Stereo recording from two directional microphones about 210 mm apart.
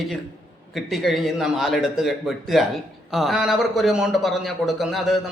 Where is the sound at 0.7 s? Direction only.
Centre (ahead or behind).